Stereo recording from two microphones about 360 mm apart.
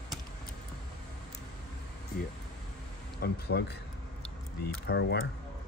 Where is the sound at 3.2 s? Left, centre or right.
Left.